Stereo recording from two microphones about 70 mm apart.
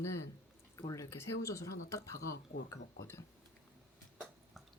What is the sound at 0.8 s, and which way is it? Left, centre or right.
Speech, left.